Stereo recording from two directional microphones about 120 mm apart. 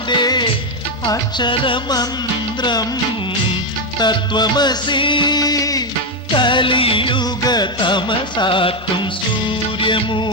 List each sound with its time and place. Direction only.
0.1 s music: 40° left (ahead or behind)
3.9 s music: 35° left (ahead or behind)
6.3 s music: 40° left (ahead or behind)
9.8 s music of bollywood: 40° left (ahead or behind)